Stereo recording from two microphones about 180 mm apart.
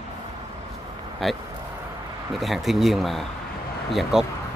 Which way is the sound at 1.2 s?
Centre (ahead or behind).